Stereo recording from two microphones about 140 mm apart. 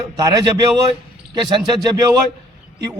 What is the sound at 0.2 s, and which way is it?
A man's voice, 25° right (ahead or behind).